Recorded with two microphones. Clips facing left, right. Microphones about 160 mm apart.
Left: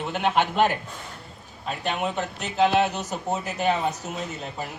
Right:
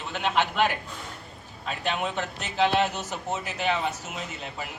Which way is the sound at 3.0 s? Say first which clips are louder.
Left 3 dB; 40° left (ahead or behind).